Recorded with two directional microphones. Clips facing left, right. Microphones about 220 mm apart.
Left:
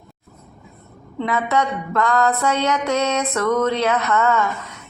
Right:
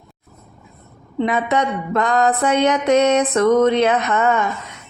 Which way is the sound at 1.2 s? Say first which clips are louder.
Right 2 dB; 20° right (ahead or behind).